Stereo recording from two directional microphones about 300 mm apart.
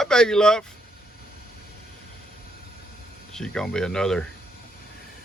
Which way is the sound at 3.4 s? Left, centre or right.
Centre.